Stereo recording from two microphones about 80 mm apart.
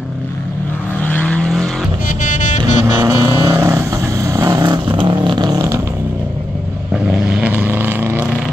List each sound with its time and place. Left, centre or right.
1.0 s vehicle: centre
2.6 s vehicle: right
4.8 s vehicle: right
6.9 s vehicle: centre
7.5 s vehicle: right